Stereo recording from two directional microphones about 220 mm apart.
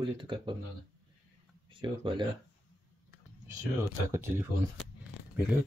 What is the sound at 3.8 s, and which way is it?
Speech, 10° right (ahead or behind).